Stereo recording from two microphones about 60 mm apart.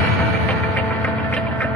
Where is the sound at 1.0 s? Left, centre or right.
Left.